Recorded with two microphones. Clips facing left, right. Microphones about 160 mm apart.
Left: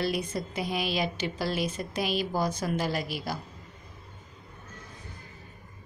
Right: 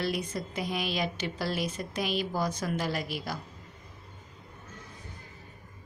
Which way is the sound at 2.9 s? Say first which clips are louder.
Left 1 dB; 5° left (ahead or behind).